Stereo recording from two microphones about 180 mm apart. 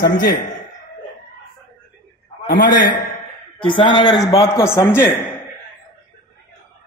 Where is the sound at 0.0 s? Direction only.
60° left (ahead or behind).